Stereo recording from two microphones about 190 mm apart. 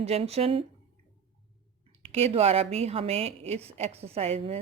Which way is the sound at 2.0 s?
35° right (ahead or behind).